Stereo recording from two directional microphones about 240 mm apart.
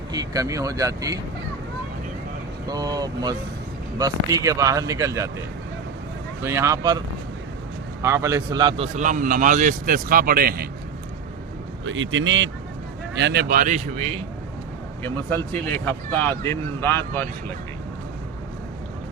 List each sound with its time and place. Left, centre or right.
0.1 s speech: centre
2.6 s speech: centre
6.4 s speech: centre
8.0 s a man's voice: centre; by 10.7 s right
11.9 s a man's voice: right
15.0 s speech: centre